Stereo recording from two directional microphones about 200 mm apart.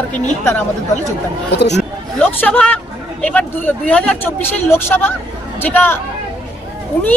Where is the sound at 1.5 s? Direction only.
60° left (ahead or behind).